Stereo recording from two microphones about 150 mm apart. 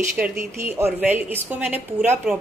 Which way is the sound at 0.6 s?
15° right (ahead or behind).